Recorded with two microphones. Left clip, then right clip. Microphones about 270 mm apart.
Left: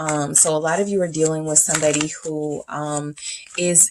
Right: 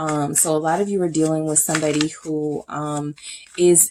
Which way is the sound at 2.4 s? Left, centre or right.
Left.